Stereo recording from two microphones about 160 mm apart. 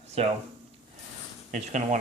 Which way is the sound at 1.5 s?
50° right (ahead or behind).